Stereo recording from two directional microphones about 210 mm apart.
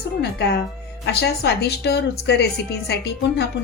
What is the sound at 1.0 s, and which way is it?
A woman's voice, 50° left (ahead or behind).